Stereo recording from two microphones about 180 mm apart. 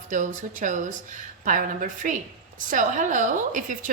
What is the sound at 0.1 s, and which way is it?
A woman's voice, 45° right (ahead or behind).